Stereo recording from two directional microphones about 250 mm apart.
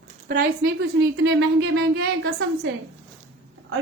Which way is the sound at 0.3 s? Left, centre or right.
Right.